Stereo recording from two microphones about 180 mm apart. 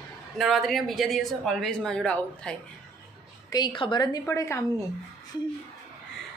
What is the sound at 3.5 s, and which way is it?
A woman's voice, 25° left (ahead or behind).